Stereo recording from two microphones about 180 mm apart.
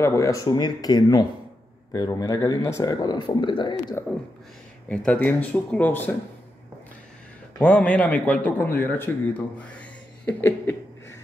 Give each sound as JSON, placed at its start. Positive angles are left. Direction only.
{"t": 0.0, "sound": "speech", "side_deg": 15}
{"t": 4.0, "sound": "a man's voice", "side_deg": 15}
{"t": 7.6, "sound": "a man's voice", "side_deg": 5}
{"t": 9.6, "sound": "a sound", "side_deg": 5}